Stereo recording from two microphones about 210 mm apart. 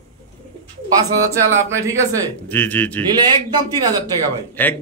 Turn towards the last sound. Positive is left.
turn(degrees=10)  # may be behind; listen again after turning